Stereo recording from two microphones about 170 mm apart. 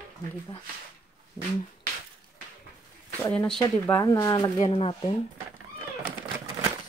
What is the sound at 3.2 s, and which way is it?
Speech, 5° left (ahead or behind).